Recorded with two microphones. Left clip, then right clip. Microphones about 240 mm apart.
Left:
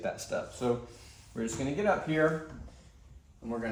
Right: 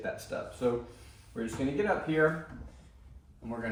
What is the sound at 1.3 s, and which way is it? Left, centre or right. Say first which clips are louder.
Speech: left 1 dB; left.